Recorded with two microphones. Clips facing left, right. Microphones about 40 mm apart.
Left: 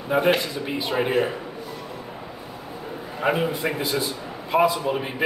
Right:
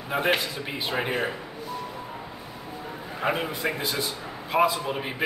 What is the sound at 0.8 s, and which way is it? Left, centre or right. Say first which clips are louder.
Speech: left 5 dB; centre.